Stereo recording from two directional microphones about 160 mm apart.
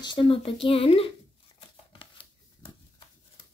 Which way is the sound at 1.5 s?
30° left (ahead or behind).